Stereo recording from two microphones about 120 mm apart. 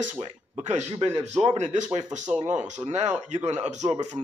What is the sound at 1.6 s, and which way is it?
Speech, 90° right.